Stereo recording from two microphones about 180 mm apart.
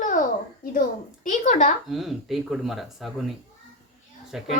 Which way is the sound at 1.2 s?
45° left (ahead or behind).